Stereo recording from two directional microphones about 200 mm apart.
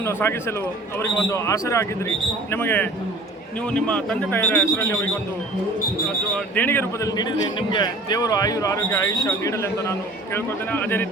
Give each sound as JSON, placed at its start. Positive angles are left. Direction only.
{"t": 0.0, "sound": "speech", "side_deg": 10}
{"t": 6.6, "sound": "speech", "side_deg": 10}
{"t": 7.2, "sound": "speech", "side_deg": 20}